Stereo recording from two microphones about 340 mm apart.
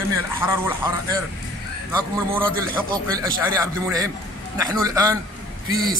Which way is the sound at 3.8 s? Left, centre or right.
Centre.